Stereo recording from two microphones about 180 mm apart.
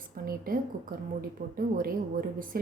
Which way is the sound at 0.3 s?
55° right (ahead or behind).